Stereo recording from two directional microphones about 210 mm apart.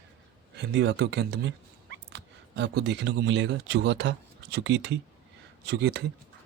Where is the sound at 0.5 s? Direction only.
55° right (ahead or behind).